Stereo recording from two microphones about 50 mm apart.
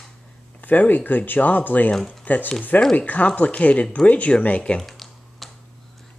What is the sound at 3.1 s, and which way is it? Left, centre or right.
Speech, left.